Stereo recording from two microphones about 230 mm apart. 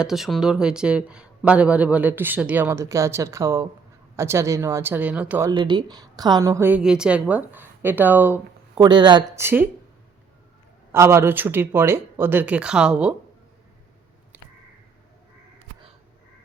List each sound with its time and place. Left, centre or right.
0.0 s a woman's voice: centre
5.5 s a woman's voice: centre
8.7 s a woman's voice: centre
10.9 s a woman's voice: centre